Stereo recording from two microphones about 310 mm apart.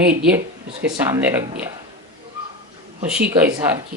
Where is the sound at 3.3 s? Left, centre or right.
Centre.